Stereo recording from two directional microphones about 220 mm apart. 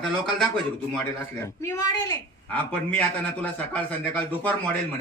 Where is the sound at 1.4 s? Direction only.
15° left (ahead or behind).